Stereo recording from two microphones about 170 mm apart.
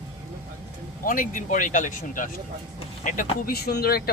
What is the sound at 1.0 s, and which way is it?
Speech, 55° left (ahead or behind).